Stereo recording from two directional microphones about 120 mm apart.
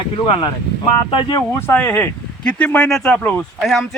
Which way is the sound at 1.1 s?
35° left (ahead or behind).